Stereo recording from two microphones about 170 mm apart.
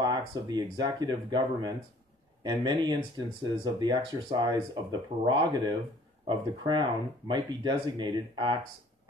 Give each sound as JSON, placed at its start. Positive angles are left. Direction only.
{"t": 0.0, "sound": "speech", "side_deg": -25}